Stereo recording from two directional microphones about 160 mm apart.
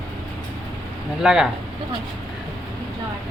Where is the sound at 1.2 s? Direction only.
5° right (ahead or behind).